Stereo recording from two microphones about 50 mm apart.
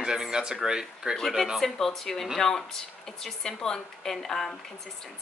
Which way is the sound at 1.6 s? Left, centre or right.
Centre.